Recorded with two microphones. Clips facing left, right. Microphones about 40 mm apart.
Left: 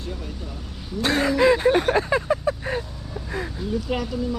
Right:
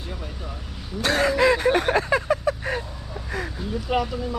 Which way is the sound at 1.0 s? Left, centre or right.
Right.